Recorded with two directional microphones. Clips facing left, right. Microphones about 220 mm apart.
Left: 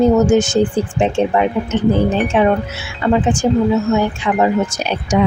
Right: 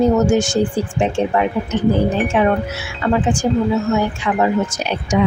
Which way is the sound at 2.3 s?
25° left (ahead or behind).